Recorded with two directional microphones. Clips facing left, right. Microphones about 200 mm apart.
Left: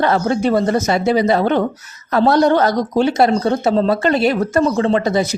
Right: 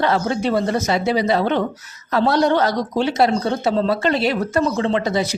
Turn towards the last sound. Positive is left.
turn(degrees=45)  # may be behind; listen again after turning